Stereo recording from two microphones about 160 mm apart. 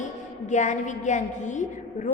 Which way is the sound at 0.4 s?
50° left (ahead or behind).